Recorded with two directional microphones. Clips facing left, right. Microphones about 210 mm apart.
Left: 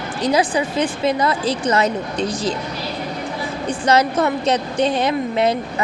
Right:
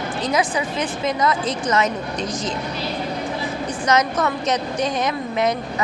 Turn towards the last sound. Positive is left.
turn(degrees=30)  # may be behind; listen again after turning